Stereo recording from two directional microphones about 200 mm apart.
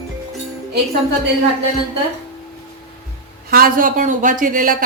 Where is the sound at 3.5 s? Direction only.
45° right (ahead or behind).